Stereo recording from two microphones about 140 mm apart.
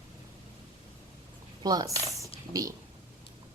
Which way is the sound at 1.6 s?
25° right (ahead or behind).